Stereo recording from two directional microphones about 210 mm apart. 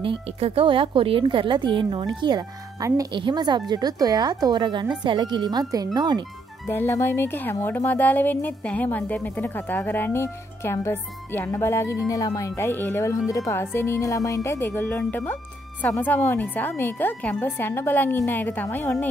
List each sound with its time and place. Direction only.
0.0 s a woman's voice: 25° right (ahead or behind)
6.7 s speech: 10° left (ahead or behind)